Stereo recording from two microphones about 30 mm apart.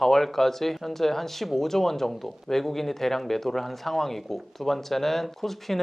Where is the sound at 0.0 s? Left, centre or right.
Centre.